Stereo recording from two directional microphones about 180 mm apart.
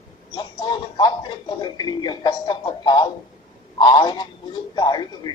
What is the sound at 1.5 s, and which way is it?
A man's voice, 25° left (ahead or behind).